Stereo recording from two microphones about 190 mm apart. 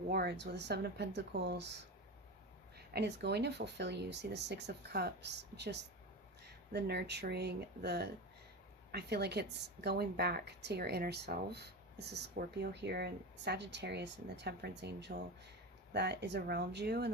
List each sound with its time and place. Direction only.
0.1 s a woman's voice: 60° right (ahead or behind)